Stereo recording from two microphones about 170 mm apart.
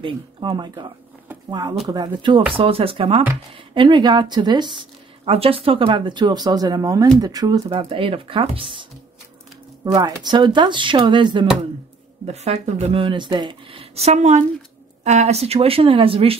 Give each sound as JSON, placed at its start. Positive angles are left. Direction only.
{"t": 0.0, "sound": "speech", "side_deg": -30}
{"t": 7.9, "sound": "speech", "side_deg": -30}
{"t": 9.9, "sound": "speech", "side_deg": -25}
{"t": 12.3, "sound": "speech", "side_deg": -40}